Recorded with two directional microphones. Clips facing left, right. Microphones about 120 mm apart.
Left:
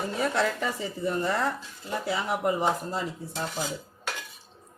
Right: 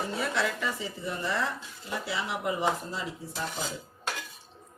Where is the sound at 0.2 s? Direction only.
45° left (ahead or behind).